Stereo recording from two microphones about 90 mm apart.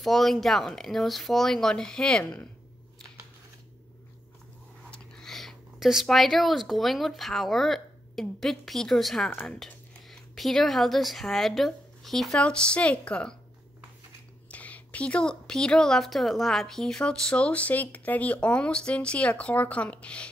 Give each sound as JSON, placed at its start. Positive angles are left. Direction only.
{"t": 0.0, "sound": "speech", "side_deg": 0}
{"t": 4.9, "sound": "speech", "side_deg": 5}
{"t": 14.5, "sound": "speech", "side_deg": 15}